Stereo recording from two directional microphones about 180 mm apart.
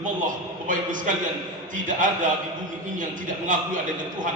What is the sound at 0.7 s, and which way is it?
A man's voice, 45° right (ahead or behind).